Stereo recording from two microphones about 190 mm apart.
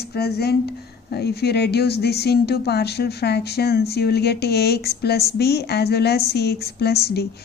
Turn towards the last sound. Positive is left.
turn(degrees=60)  # may be behind; listen again after turning